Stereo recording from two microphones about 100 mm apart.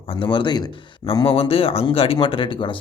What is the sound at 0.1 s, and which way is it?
Speech, 60° left (ahead or behind).